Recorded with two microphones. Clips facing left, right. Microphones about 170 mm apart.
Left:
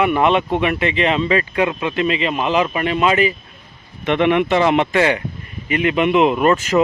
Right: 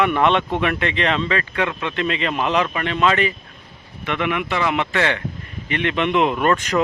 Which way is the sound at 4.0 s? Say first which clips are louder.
Left 8 dB; 25° left (ahead or behind).